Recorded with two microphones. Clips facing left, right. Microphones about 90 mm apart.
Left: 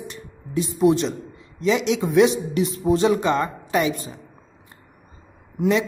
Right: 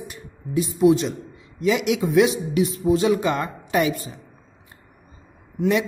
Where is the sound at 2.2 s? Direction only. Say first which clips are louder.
Even; 40° left (ahead or behind).